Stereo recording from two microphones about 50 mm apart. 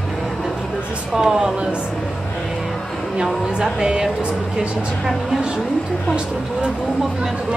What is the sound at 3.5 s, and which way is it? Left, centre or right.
Speech, centre.